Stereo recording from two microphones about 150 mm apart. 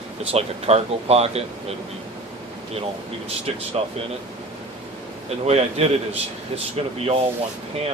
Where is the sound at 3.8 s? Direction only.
45° right (ahead or behind).